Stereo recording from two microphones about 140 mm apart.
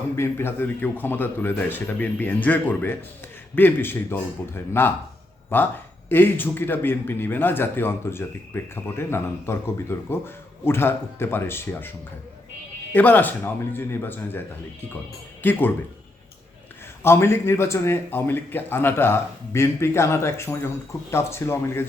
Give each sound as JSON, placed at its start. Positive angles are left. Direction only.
{"t": 0.2, "sound": "a man's voice", "side_deg": 15}
{"t": 12.9, "sound": "a man's voice", "side_deg": 10}
{"t": 15.4, "sound": "a man's voice", "side_deg": 15}
{"t": 17.0, "sound": "a man's voice", "side_deg": 20}